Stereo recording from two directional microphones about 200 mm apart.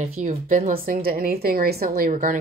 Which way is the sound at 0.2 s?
40° right (ahead or behind).